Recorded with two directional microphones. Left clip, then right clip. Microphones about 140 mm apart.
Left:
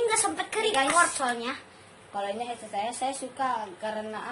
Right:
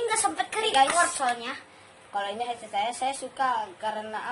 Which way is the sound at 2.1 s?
25° right (ahead or behind).